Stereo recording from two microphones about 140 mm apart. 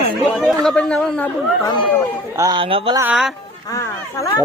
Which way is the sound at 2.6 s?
40° right (ahead or behind).